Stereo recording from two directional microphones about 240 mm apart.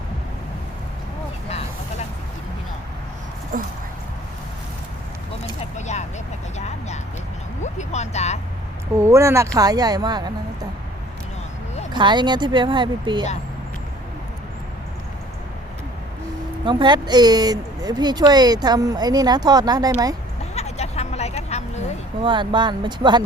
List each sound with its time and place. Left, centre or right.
3.5 s speech: right
5.7 s a sound: left
6.6 s vehicle: left
7.6 s a sound: left
9.0 s speech: centre
11.9 s speech: centre
16.6 s speech: centre
20.4 s vehicle: left
22.2 s speech: centre